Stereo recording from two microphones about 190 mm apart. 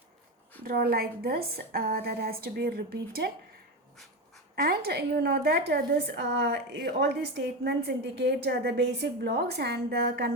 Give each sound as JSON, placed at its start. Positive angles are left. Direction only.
{"t": 0.6, "sound": "a woman's voice", "side_deg": -55}
{"t": 4.5, "sound": "a woman's voice", "side_deg": -55}